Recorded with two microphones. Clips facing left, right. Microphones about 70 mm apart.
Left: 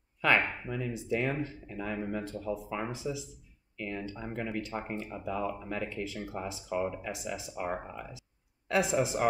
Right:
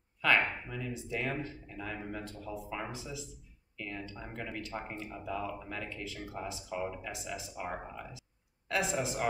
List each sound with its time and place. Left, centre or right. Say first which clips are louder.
0.2 s speech: left 2 dB; centre